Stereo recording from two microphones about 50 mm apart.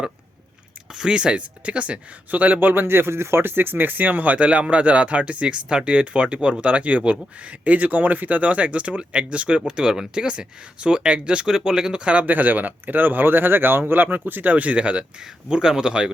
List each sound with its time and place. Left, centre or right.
0.9 s speech: centre
12.3 s speech: right; by 16.1 s centre